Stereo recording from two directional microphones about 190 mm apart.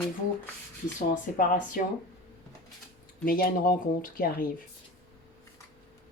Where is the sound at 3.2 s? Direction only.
50° left (ahead or behind).